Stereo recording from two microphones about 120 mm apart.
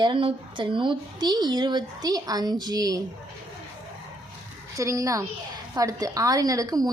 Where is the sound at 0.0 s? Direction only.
45° right (ahead or behind).